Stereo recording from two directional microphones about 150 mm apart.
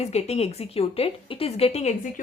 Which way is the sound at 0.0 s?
45° left (ahead or behind).